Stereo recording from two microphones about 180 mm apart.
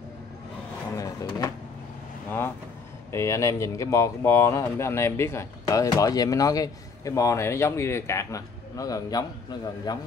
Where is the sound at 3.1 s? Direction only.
15° left (ahead or behind).